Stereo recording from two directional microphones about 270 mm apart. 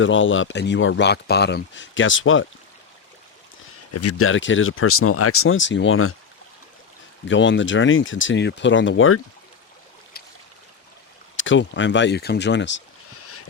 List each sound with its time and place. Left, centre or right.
0.0 s speech: left
3.9 s speech: left
7.3 s speech: left
11.3 s speech: left